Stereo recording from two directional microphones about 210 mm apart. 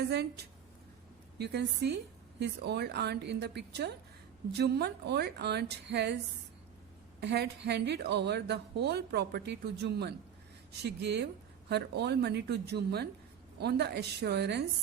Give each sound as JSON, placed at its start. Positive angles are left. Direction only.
{"t": 0.0, "sound": "a woman's voice", "side_deg": -50}
{"t": 1.4, "sound": "a woman's voice", "side_deg": -50}
{"t": 7.2, "sound": "a woman's voice", "side_deg": -50}